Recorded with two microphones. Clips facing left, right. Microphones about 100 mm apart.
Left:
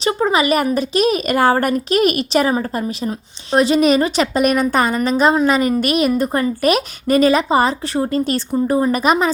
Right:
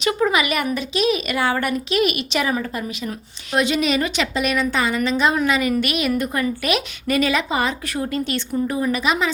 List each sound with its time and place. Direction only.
0.0 s a woman's voice: 30° left (ahead or behind)